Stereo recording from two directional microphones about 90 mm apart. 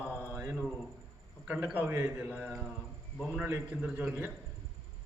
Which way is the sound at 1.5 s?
10° right (ahead or behind).